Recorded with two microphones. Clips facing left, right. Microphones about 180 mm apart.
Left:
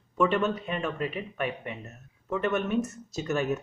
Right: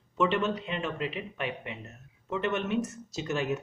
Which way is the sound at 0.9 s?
40° left (ahead or behind).